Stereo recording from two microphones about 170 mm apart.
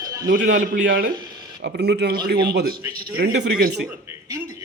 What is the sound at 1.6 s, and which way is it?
A man's voice, 75° right (ahead or behind).